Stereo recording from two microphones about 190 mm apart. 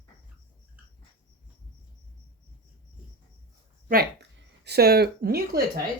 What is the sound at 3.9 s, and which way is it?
Speech, 55° right (ahead or behind).